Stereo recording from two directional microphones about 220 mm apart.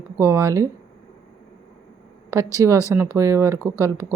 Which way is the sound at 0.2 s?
10° right (ahead or behind).